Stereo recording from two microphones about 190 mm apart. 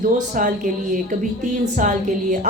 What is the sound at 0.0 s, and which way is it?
Speech, 45° right (ahead or behind).